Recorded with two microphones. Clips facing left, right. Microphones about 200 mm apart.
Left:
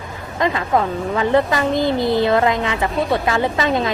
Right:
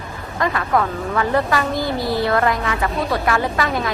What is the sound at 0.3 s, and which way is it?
A woman's voice, 20° left (ahead or behind).